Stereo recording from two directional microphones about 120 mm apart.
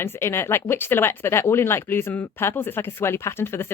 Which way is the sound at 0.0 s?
20° left (ahead or behind).